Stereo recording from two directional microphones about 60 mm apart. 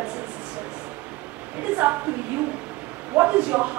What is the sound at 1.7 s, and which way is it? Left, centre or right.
Speech, right.